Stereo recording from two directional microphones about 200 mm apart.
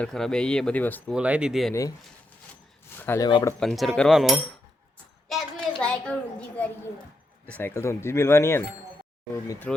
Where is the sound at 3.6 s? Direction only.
Centre (ahead or behind).